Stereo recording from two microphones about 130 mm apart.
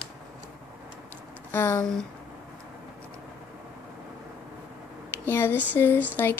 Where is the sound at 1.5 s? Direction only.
15° left (ahead or behind).